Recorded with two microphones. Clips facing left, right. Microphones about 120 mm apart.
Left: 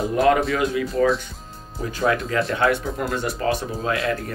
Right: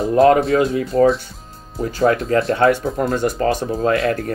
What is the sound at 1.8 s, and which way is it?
Speech, 35° right (ahead or behind).